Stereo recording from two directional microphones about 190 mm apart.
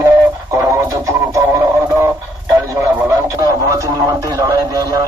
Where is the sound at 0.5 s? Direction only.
15° right (ahead or behind).